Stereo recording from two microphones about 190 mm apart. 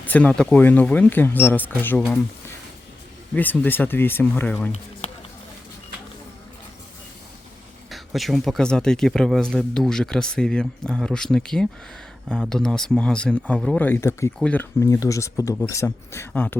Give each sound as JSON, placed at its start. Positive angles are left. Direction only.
{"t": 0.0, "sound": "speech", "side_deg": 10}
{"t": 3.3, "sound": "speech", "side_deg": 10}
{"t": 4.7, "sound": "a sound", "side_deg": 35}
{"t": 7.9, "sound": "speech", "side_deg": 0}